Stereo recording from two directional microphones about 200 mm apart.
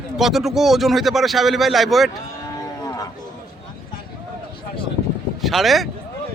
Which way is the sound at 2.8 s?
20° left (ahead or behind).